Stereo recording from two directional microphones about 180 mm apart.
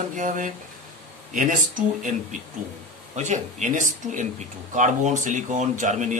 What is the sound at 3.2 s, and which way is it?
Speech, 40° right (ahead or behind).